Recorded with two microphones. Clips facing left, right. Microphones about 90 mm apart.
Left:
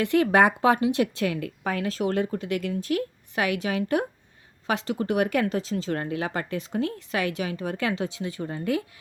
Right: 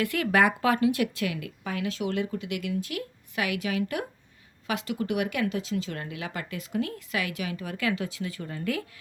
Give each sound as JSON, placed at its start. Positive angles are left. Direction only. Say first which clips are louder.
{"t": 0.0, "sound": "speech", "louder": "left 4 dB", "side_deg": 25}